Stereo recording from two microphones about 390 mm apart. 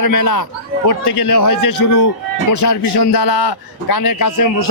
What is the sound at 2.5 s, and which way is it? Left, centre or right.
A man's voice, left.